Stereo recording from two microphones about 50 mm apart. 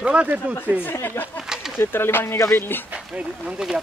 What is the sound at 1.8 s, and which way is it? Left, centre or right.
Speech, left.